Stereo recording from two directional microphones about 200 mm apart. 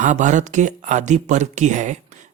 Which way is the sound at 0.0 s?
40° right (ahead or behind).